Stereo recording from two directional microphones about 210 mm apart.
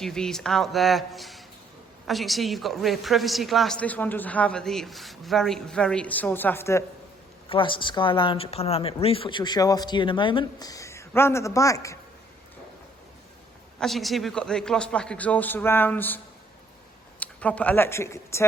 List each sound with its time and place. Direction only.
0.0 s a woman's voice: 5° left (ahead or behind)
7.5 s speech: 25° left (ahead or behind)
13.7 s a woman's voice: centre (ahead or behind)